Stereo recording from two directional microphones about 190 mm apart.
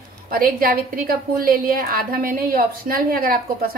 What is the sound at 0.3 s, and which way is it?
A woman's voice, 50° right (ahead or behind).